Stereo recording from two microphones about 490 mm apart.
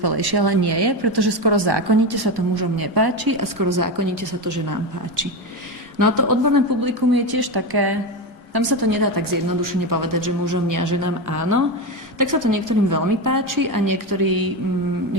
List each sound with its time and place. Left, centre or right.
0.0 s a woman's voice: right